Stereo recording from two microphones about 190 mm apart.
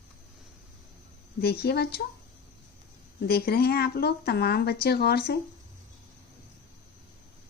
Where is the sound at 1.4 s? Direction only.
55° left (ahead or behind).